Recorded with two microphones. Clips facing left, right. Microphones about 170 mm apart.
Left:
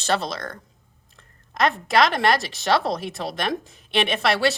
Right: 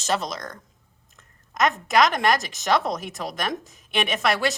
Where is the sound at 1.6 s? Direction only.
30° left (ahead or behind).